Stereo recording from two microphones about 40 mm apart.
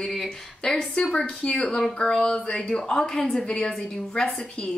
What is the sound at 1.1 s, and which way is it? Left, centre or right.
A woman's voice, left.